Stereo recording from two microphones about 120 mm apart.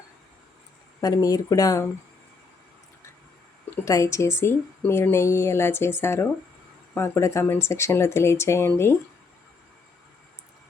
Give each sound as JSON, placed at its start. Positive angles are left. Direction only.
{"t": 1.0, "sound": "a woman's voice", "side_deg": 30}
{"t": 3.8, "sound": "a woman's voice", "side_deg": 25}